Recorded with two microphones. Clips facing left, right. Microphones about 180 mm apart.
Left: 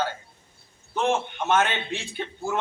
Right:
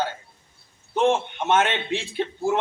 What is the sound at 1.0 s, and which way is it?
A man's voice, 25° right (ahead or behind).